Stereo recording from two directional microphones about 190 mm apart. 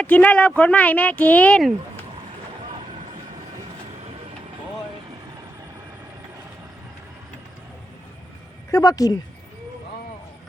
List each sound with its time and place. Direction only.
0.0 s speech: 5° left (ahead or behind)
8.7 s speech: 20° left (ahead or behind)